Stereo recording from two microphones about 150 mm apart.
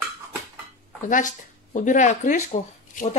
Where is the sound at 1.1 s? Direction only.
55° left (ahead or behind).